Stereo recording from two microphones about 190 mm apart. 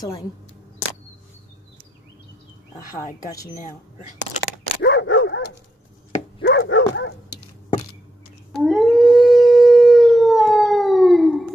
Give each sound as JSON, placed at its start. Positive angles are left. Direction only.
{"t": 4.8, "sound": "dog", "side_deg": 80}
{"t": 6.4, "sound": "dog", "side_deg": 70}
{"t": 8.6, "sound": "howl", "side_deg": 0}